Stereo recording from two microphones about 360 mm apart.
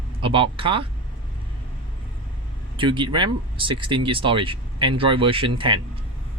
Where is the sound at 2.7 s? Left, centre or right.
Centre.